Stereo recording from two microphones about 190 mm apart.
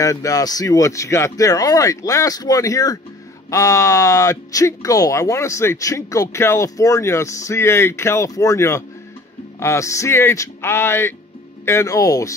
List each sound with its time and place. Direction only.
0.0 s speech: 15° left (ahead or behind)